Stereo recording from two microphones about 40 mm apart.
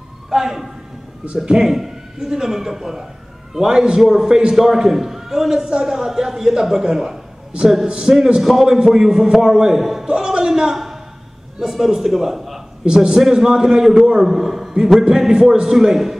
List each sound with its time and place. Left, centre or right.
0.3 s speech: centre
1.2 s a man's voice: right
4.0 s a man's voice: centre
9.8 s a man's voice: centre
10.0 s a sound: centre
10.7 s a sound: centre
11.6 s a man's voice: centre
12.8 s a man's voice: centre
14.2 s a man's voice: centre